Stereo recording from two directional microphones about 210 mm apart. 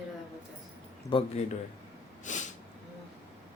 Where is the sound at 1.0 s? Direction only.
30° left (ahead or behind).